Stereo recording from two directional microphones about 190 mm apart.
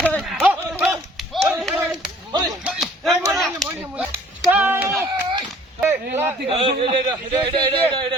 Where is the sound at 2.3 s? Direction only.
20° right (ahead or behind).